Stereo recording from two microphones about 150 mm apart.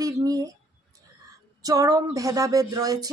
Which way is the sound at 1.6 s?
25° right (ahead or behind).